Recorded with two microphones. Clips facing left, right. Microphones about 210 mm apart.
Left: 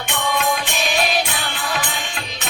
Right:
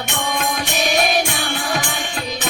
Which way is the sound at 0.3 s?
45° right (ahead or behind).